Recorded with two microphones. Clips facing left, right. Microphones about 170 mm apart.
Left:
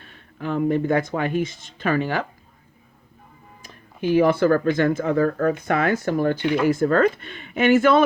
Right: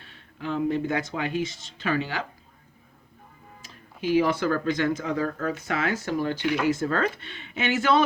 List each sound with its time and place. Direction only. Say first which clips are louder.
0.0 s speech: left 4 dB; 50° left (ahead or behind)
3.6 s speech: left 5 dB; 50° left (ahead or behind)